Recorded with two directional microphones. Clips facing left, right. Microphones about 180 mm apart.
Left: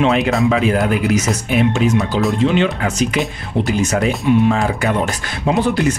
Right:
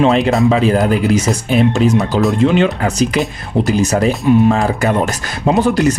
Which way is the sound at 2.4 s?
45° right (ahead or behind).